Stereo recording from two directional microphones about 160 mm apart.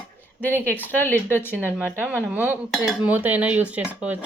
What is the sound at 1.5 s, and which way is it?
Speech, 10° right (ahead or behind).